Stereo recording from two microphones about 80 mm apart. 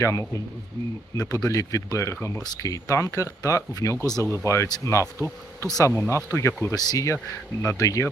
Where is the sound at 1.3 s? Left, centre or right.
Left.